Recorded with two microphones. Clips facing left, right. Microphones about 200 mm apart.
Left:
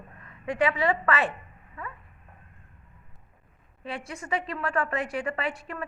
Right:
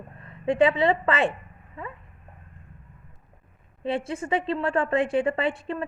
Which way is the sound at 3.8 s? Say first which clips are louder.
Right 9 dB; 30° right (ahead or behind).